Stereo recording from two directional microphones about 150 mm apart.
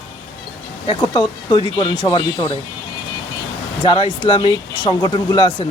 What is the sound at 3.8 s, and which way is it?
Speech, 35° left (ahead or behind).